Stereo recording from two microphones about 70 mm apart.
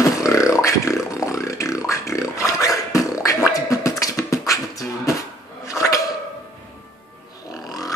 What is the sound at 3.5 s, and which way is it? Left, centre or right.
Beatboxing, left.